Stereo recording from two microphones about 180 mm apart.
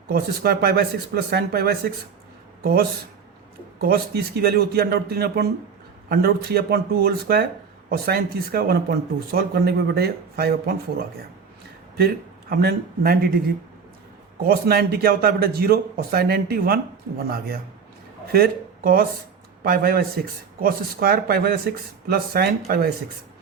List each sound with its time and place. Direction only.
0.1 s speech: 60° right (ahead or behind)
3.8 s speech: 55° right (ahead or behind)
11.9 s speech: 60° right (ahead or behind)
14.4 s speech: 60° right (ahead or behind)